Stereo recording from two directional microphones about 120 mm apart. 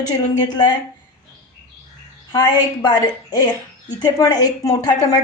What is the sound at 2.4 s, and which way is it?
A woman's voice, 35° left (ahead or behind).